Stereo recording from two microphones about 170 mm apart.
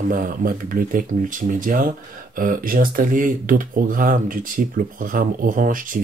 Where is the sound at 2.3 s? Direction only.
55° right (ahead or behind).